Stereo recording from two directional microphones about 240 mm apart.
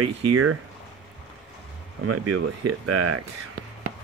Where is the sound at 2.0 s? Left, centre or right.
Right.